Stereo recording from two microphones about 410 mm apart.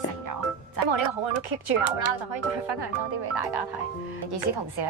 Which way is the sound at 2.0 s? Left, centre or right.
Right.